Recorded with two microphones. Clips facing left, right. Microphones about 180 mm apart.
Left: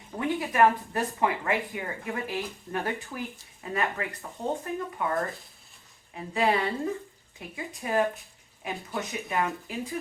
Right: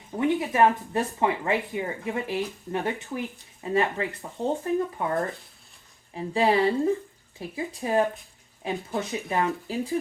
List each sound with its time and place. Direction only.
0.2 s speech: 25° right (ahead or behind)
6.1 s speech: 30° right (ahead or behind)